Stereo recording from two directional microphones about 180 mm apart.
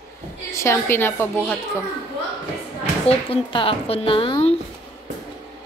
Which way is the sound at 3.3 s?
30° left (ahead or behind).